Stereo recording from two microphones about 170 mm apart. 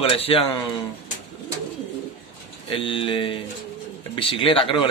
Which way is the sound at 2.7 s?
30° left (ahead or behind).